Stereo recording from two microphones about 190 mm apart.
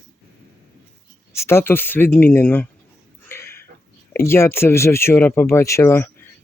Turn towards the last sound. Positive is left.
turn(degrees=15)  # may be behind; listen again after turning